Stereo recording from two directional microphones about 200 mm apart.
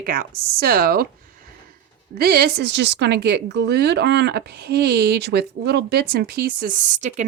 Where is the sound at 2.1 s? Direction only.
50° right (ahead or behind).